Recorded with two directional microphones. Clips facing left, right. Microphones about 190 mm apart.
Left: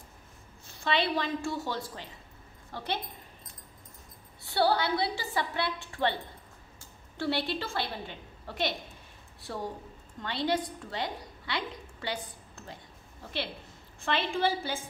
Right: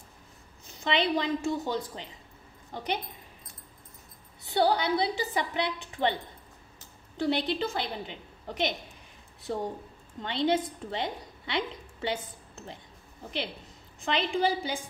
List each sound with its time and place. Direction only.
0.7 s a woman's voice: 20° right (ahead or behind)
4.4 s a woman's voice: 20° right (ahead or behind)
7.2 s a woman's voice: 20° right (ahead or behind)
14.0 s a woman's voice: 15° right (ahead or behind)